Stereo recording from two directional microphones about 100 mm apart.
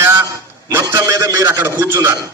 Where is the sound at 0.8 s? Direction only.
35° right (ahead or behind).